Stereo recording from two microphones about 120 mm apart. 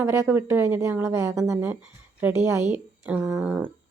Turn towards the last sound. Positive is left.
turn(degrees=-5)  # may be behind; listen again after turning